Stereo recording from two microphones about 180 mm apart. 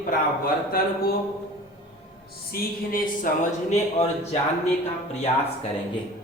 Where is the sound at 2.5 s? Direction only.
50° left (ahead or behind).